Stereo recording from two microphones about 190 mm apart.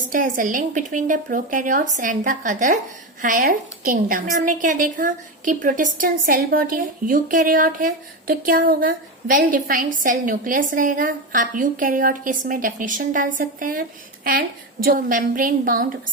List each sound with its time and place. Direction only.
0.1 s a woman's voice: 45° right (ahead or behind)
14.8 s a woman's voice: 45° right (ahead or behind)